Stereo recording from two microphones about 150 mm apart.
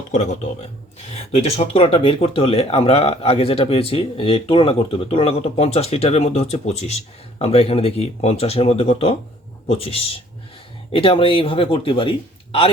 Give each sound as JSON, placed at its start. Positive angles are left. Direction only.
{"t": 0.1, "sound": "speech", "side_deg": 50}